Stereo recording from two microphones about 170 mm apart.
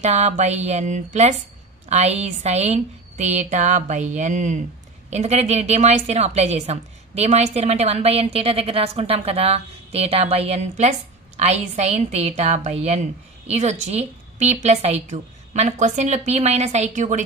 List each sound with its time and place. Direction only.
0.0 s a woman's voice: 40° right (ahead or behind)